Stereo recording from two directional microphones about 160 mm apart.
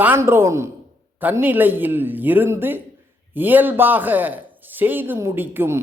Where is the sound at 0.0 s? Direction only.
15° right (ahead or behind).